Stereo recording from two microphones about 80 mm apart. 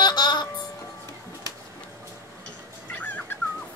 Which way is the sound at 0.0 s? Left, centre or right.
Left.